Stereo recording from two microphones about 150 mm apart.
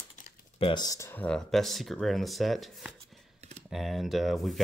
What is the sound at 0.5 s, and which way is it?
Speech, 30° left (ahead or behind).